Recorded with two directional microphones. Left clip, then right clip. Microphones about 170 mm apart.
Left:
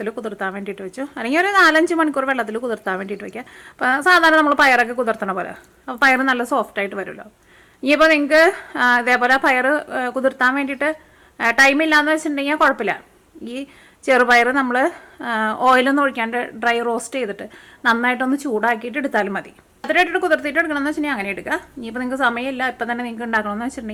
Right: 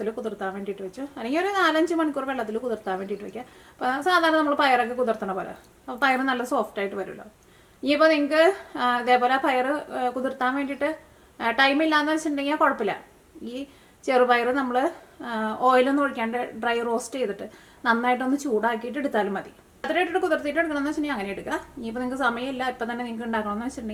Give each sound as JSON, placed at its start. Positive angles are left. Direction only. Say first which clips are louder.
{"t": 0.0, "sound": "a woman's voice", "louder": "left 4 dB", "side_deg": 30}
{"t": 14.0, "sound": "a woman's voice", "louder": "left 6 dB", "side_deg": 30}